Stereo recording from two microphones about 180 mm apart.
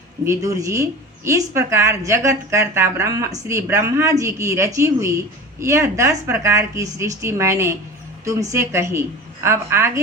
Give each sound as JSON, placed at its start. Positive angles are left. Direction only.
{"t": 0.3, "sound": "a woman's voice", "side_deg": -15}